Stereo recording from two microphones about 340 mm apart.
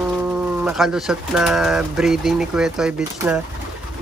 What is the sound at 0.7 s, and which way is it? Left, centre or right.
Speech, centre.